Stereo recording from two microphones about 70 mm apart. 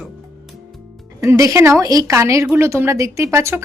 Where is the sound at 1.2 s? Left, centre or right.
Right.